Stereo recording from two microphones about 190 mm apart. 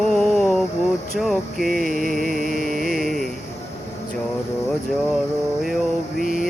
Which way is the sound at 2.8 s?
Centre (ahead or behind).